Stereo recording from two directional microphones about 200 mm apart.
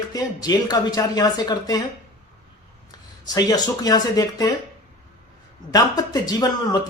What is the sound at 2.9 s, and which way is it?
Speech, 20° left (ahead or behind).